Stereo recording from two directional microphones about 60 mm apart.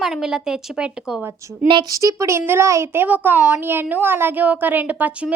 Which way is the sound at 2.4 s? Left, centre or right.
Right.